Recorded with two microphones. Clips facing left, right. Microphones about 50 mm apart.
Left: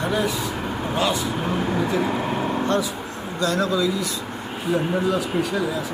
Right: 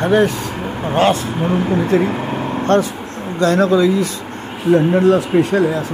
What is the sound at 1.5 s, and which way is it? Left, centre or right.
Speech, right.